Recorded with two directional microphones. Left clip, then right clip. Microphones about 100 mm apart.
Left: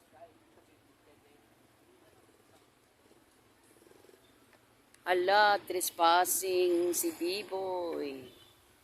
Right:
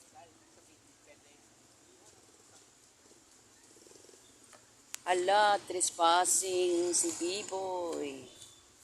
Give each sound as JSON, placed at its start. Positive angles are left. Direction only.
{"t": 5.0, "sound": "speech", "side_deg": 30}